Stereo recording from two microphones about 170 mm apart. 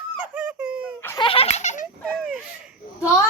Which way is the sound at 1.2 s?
35° left (ahead or behind).